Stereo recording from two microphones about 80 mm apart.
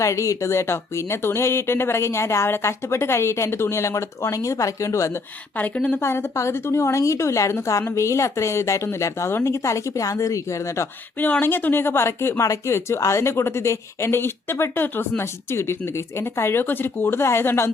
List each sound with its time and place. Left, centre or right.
0.0 s speech: left
5.5 s a woman's voice: centre
6.0 s speech: left
11.2 s speech: left